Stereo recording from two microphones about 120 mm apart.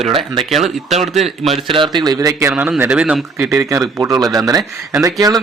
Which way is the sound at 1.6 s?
45° right (ahead or behind).